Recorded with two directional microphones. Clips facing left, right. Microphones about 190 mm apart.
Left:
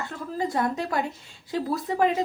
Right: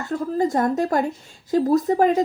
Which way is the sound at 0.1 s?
45° right (ahead or behind).